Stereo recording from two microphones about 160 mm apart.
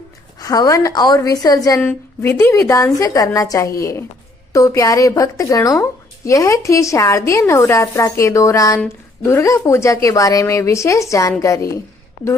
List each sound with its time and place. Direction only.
0.3 s speech: 20° left (ahead or behind)